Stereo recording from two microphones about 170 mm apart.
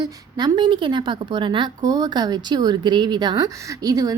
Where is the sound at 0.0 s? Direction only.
25° right (ahead or behind).